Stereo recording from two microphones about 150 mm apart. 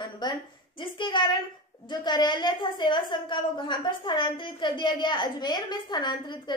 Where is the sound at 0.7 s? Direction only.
30° left (ahead or behind).